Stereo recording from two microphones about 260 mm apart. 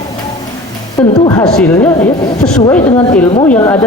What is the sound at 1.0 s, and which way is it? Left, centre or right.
A woman's voice, centre.